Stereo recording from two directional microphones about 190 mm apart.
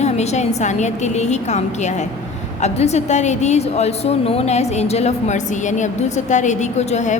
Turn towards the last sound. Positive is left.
turn(degrees=40)  # may be behind; listen again after turning